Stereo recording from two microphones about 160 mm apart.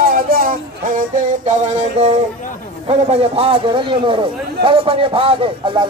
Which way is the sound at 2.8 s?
40° right (ahead or behind).